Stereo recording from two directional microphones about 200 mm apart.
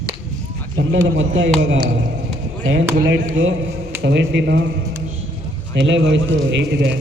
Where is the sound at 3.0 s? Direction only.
70° right (ahead or behind).